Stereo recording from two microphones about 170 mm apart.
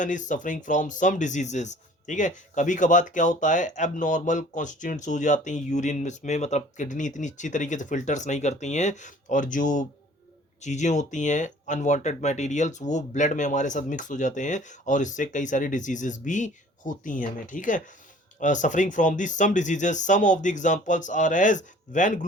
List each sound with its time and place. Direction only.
0.0 s speech: 50° left (ahead or behind)